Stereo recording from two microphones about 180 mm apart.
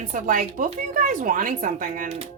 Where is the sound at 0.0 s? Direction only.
45° right (ahead or behind).